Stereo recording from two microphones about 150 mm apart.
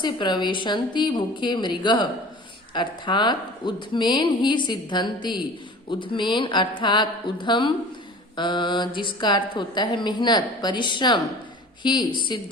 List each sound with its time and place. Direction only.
0.0 s a woman's voice: 30° left (ahead or behind)